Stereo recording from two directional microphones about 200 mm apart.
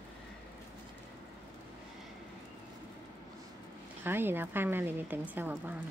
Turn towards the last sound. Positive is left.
turn(degrees=-10)  # may be behind; listen again after turning